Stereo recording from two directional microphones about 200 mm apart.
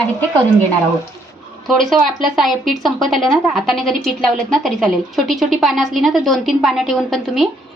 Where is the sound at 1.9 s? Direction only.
Centre (ahead or behind).